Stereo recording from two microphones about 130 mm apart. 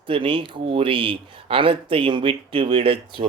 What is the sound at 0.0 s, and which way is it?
A man's voice, 40° right (ahead or behind).